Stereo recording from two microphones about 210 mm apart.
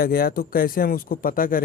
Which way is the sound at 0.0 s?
45° left (ahead or behind).